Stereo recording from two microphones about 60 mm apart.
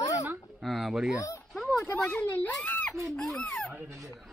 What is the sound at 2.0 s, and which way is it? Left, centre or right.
Speech, left.